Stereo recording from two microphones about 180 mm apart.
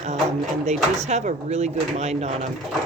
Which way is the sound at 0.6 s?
40° right (ahead or behind).